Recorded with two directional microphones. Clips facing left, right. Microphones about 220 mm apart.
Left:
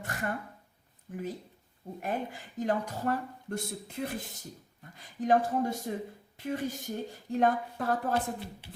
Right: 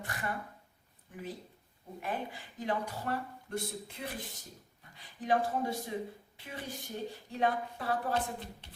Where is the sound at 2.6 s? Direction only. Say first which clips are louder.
Left 5 dB; 45° left (ahead or behind).